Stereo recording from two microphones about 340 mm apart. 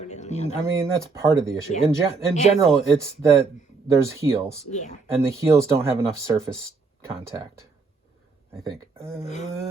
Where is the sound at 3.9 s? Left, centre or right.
Centre.